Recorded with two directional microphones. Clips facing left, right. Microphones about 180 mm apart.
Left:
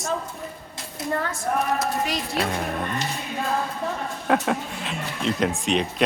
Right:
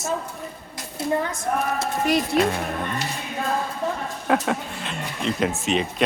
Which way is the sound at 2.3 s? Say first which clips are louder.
Right 4 dB; centre (ahead or behind).